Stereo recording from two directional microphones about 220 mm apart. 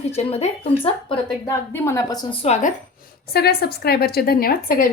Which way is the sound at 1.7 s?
10° left (ahead or behind).